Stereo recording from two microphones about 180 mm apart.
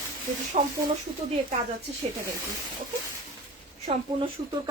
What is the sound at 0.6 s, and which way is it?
Speech, 40° right (ahead or behind).